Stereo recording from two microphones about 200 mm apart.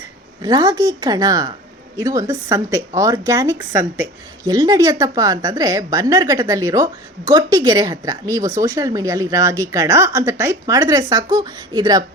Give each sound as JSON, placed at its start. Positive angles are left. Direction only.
{"t": 0.4, "sound": "a woman's voice", "side_deg": -20}